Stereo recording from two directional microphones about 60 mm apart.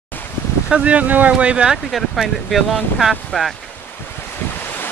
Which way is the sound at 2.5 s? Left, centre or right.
Centre.